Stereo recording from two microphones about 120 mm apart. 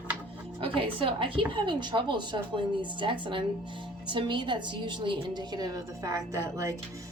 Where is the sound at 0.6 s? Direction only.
45° right (ahead or behind).